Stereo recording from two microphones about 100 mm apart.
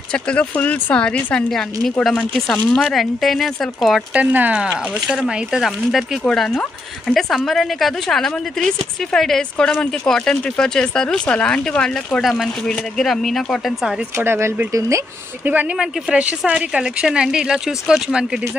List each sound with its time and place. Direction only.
0.1 s speech: 10° left (ahead or behind)
2.5 s speech: 15° left (ahead or behind)
2.9 s a woman's voice: centre (ahead or behind)
4.1 s speech: 15° right (ahead or behind)
5.0 s a woman's voice: centre (ahead or behind)
14.1 s speech: 25° right (ahead or behind)
15.4 s speech: 15° right (ahead or behind)